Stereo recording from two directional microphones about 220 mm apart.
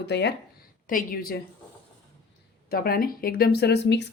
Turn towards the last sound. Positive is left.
turn(degrees=50)  # may be behind; listen again after turning